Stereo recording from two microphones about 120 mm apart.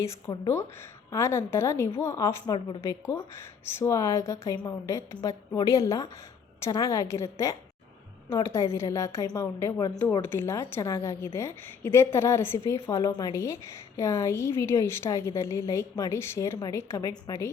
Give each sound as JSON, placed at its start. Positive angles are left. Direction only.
{"t": 0.3, "sound": "a woman's voice", "side_deg": 30}